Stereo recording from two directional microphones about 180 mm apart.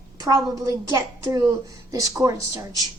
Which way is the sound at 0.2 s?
20° right (ahead or behind).